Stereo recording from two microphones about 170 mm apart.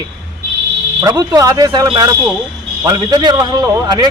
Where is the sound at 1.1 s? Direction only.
20° right (ahead or behind).